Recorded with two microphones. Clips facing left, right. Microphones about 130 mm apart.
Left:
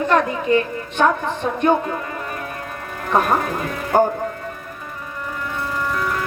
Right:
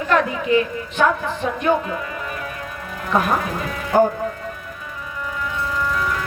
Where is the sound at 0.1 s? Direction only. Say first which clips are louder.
Right 1 dB; 50° left (ahead or behind).